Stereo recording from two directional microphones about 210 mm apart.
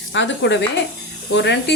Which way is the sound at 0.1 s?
60° left (ahead or behind).